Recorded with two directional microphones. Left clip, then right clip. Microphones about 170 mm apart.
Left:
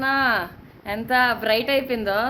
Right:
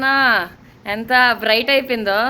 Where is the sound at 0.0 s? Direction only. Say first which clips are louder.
Right 6 dB; 5° right (ahead or behind).